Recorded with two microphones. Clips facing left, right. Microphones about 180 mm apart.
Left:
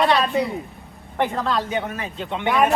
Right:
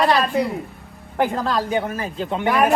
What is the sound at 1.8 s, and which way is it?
Speech, 40° right (ahead or behind).